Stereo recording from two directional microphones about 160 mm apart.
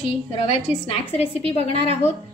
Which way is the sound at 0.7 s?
10° right (ahead or behind).